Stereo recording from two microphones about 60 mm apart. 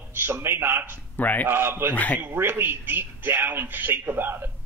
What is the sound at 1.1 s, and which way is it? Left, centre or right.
Speech, left.